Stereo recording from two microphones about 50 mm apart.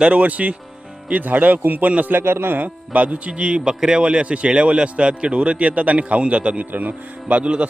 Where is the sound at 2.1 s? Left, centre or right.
Right.